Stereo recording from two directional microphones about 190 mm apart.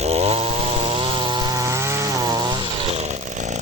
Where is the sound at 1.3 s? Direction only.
20° right (ahead or behind).